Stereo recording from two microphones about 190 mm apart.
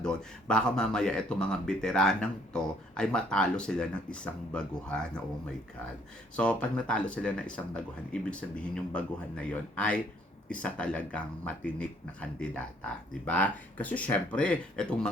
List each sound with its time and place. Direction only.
0.0 s speech: 5° left (ahead or behind)
6.3 s speech: 5° left (ahead or behind)